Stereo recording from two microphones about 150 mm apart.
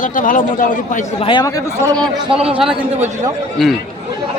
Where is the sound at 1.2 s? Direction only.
30° left (ahead or behind).